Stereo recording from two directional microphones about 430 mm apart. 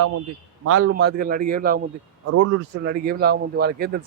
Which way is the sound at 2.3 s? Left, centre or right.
Right.